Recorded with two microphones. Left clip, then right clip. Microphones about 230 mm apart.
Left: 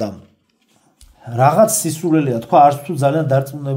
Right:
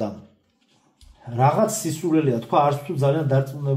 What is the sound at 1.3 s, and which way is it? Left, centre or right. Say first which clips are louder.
Speech: left 7 dB; left.